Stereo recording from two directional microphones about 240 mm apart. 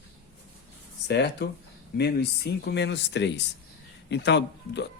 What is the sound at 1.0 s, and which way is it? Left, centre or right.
Speech, left.